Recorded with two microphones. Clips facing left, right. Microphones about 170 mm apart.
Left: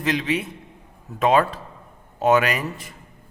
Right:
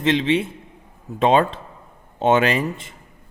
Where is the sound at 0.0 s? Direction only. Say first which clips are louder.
Right 5 dB; 25° right (ahead or behind).